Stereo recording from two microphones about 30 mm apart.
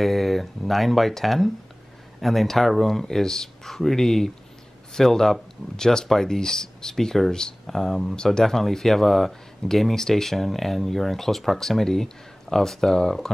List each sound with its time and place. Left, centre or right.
0.0 s speech: centre; by 7.5 s left
7.6 s speech: centre